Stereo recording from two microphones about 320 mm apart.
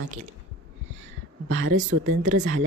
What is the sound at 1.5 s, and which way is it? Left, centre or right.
Speech, right.